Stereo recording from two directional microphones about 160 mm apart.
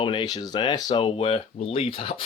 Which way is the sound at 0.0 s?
30° left (ahead or behind).